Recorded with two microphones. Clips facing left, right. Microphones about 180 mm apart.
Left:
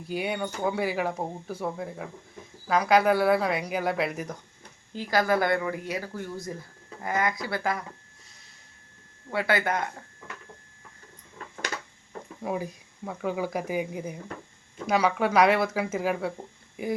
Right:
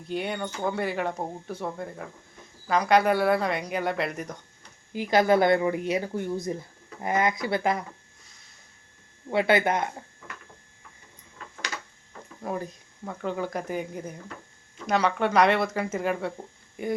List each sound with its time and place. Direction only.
0.1 s speech: 5° left (ahead or behind)
4.9 s speech: 20° right (ahead or behind)
9.3 s speech: 20° right (ahead or behind)
12.4 s speech: 5° left (ahead or behind)